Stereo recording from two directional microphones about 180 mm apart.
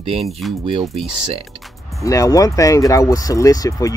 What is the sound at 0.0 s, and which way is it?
Speech, 30° right (ahead or behind).